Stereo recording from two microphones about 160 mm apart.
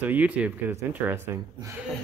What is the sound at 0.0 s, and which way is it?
Speech, 10° right (ahead or behind).